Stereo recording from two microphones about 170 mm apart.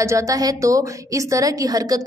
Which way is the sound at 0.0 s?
20° right (ahead or behind).